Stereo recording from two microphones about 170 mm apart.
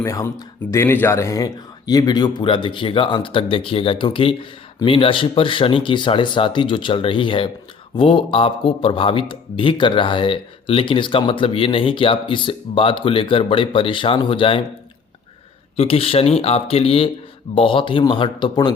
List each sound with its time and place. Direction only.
0.0 s speech: 20° left (ahead or behind)
15.7 s speech: 35° left (ahead or behind)